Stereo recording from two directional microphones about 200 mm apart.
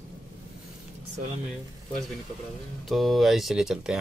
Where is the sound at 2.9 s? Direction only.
Centre (ahead or behind).